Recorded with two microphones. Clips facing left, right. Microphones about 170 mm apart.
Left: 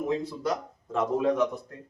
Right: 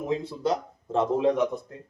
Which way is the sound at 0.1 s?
25° right (ahead or behind).